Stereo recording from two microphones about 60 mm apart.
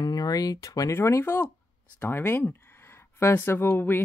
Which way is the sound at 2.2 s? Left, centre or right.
Left.